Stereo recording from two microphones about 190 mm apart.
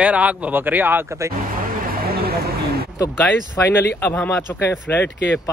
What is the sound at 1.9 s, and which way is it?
Vehicle, 55° right (ahead or behind).